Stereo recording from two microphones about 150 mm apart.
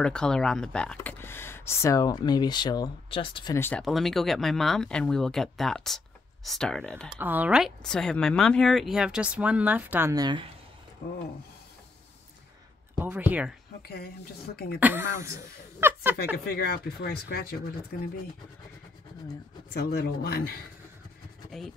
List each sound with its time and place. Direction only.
0.0 s speech: 5° left (ahead or behind); by 3.5 s 35° left (ahead or behind)
3.5 s speech: 15° left (ahead or behind)
3.8 s speech: centre (ahead or behind)
7.2 s speech: 10° right (ahead or behind); by 10.5 s 30° right (ahead or behind)
13.0 s speech: 10° right (ahead or behind)
14.5 s speech: 90° left
14.8 s speech: 15° right (ahead or behind)
16.4 s speech: 90° left
19.7 s speech: 90° left
21.5 s speech: centre (ahead or behind)